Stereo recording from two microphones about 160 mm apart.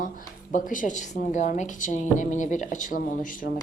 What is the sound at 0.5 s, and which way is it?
A woman's voice, 55° left (ahead or behind).